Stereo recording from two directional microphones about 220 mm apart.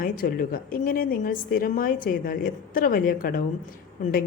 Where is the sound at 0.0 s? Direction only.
40° left (ahead or behind).